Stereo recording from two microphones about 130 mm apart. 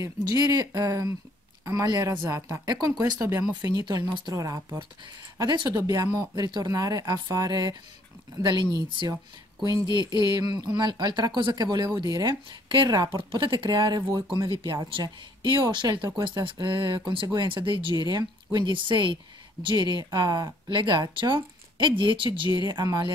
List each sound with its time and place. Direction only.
0.0 s speech: 30° right (ahead or behind)